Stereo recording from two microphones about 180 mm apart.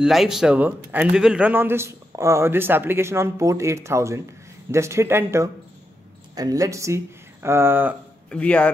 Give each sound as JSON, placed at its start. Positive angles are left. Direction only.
{"t": 0.0, "sound": "a man's voice", "side_deg": 0}
{"t": 8.3, "sound": "a man's voice", "side_deg": 5}